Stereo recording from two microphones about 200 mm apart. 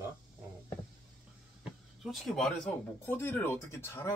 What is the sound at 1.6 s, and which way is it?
Speech, centre (ahead or behind).